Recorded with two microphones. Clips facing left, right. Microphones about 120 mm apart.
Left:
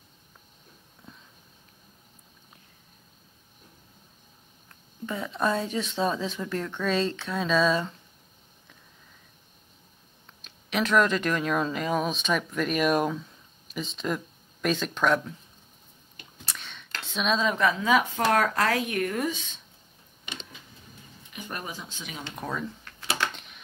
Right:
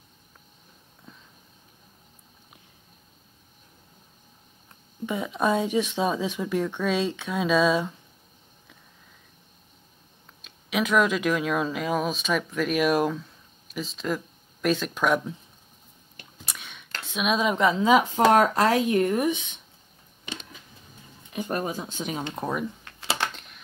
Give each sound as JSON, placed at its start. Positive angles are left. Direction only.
{"t": 4.6, "sound": "speech", "side_deg": -15}
{"t": 10.4, "sound": "speech", "side_deg": -5}
{"t": 16.4, "sound": "speech", "side_deg": -10}
{"t": 21.3, "sound": "speech", "side_deg": -40}
{"t": 22.3, "sound": "a sound", "side_deg": -20}
{"t": 23.3, "sound": "typing", "side_deg": 0}